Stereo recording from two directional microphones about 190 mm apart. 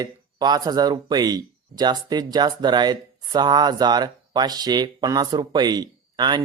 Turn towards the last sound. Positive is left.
turn(degrees=-25)  # may be behind; listen again after turning